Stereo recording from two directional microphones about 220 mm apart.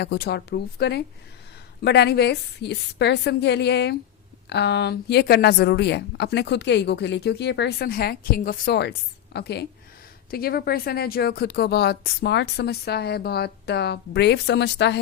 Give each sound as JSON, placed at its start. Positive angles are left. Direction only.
{"t": 0.0, "sound": "a woman's voice", "side_deg": 45}